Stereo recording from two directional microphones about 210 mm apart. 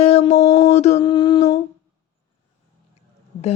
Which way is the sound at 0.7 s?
30° left (ahead or behind).